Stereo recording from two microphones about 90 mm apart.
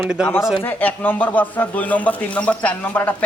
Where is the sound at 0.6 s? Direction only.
20° left (ahead or behind).